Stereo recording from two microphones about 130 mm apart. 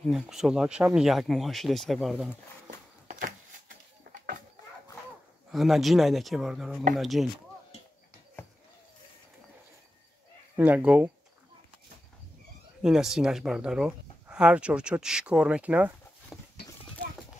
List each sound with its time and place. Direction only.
0.0 s speech: centre (ahead or behind)
3.1 s a sound: 90° right
5.5 s speech: centre (ahead or behind)
10.5 s speech: 10° right (ahead or behind)
12.8 s speech: 5° right (ahead or behind)
16.3 s a sound: 5° right (ahead or behind)